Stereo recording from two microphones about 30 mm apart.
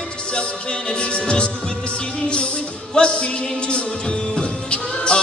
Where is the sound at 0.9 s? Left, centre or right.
Left.